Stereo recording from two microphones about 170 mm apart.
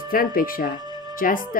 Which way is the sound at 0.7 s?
25° right (ahead or behind).